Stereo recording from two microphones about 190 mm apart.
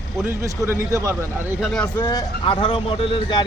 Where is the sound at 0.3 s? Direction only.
15° right (ahead or behind).